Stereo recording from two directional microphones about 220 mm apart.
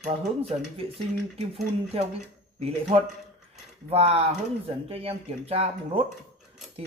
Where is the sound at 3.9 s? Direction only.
25° right (ahead or behind).